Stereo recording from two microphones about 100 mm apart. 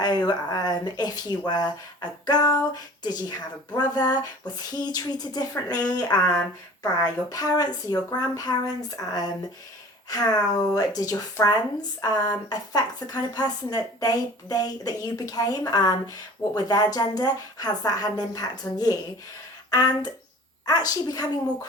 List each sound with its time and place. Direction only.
0.0 s speech: 45° left (ahead or behind)